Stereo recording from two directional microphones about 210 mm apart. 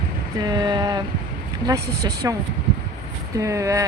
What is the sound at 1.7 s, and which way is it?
Speech, 15° right (ahead or behind).